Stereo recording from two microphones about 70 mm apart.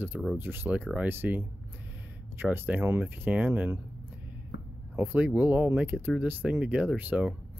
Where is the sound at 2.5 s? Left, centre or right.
Right.